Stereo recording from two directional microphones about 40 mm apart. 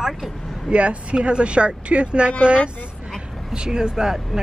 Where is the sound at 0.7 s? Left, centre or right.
Right.